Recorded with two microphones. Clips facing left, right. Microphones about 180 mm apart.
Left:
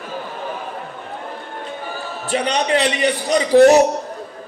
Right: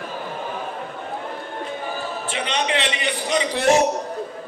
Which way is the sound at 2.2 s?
40° left (ahead or behind).